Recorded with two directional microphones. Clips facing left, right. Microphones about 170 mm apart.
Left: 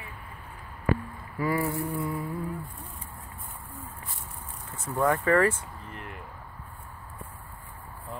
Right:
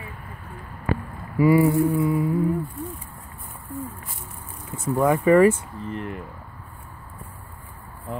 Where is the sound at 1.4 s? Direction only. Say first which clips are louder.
Right 11 dB; 15° right (ahead or behind).